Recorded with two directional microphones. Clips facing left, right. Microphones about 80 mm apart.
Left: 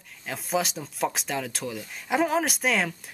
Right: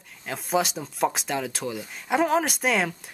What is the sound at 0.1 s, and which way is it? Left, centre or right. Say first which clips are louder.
Speech: right 2 dB; centre.